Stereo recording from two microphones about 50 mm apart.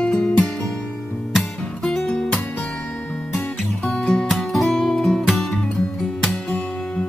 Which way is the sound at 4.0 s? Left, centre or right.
Left.